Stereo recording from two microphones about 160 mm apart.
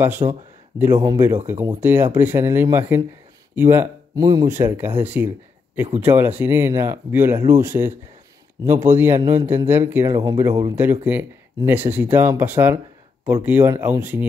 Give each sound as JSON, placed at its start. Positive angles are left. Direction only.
{"t": 0.3, "sound": "speech", "side_deg": -15}
{"t": 4.6, "sound": "speech", "side_deg": -15}
{"t": 9.2, "sound": "speech", "side_deg": -25}
{"t": 9.7, "sound": "speech", "side_deg": -15}